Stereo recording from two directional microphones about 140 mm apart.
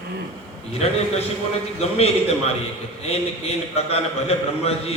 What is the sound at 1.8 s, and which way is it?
Speech, 50° left (ahead or behind).